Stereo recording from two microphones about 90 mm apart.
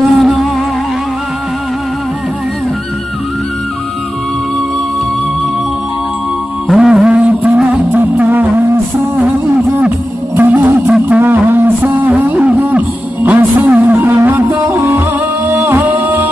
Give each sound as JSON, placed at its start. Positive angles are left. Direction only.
{"t": 0.2, "sound": "music", "side_deg": 0}
{"t": 6.7, "sound": "music", "side_deg": -5}